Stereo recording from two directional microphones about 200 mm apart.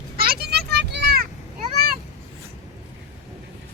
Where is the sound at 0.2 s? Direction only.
50° right (ahead or behind).